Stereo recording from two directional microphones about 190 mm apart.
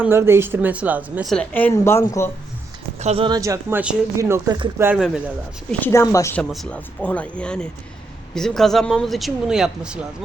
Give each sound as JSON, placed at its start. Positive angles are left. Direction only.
{"t": 0.0, "sound": "speech", "side_deg": -15}
{"t": 1.3, "sound": "speech", "side_deg": 5}
{"t": 3.0, "sound": "speech", "side_deg": -30}
{"t": 4.8, "sound": "speech", "side_deg": -10}
{"t": 5.8, "sound": "speech", "side_deg": 15}
{"t": 6.4, "sound": "speech", "side_deg": 0}